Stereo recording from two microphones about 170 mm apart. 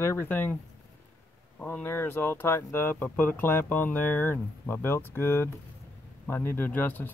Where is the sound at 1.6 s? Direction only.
10° left (ahead or behind).